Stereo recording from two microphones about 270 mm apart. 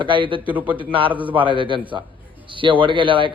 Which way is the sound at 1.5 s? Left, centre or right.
Centre.